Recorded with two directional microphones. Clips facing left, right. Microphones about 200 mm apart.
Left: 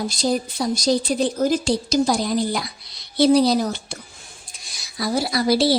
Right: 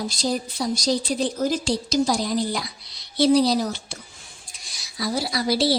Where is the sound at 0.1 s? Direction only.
50° left (ahead or behind).